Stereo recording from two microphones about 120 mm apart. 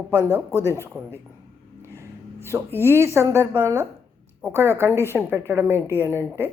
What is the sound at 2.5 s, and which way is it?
A woman's voice, 20° right (ahead or behind).